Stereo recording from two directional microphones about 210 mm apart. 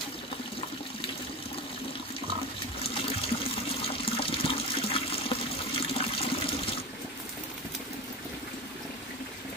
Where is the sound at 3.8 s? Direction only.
25° left (ahead or behind).